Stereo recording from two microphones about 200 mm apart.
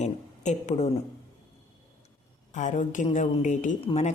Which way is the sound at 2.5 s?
40° left (ahead or behind).